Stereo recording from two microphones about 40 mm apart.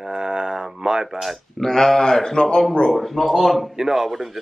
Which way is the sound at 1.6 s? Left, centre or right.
Centre.